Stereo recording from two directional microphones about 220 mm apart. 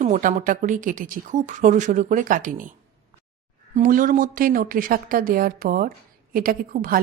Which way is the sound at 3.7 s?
35° right (ahead or behind).